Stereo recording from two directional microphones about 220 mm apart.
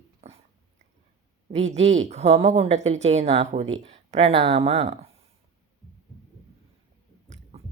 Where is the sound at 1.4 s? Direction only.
30° right (ahead or behind).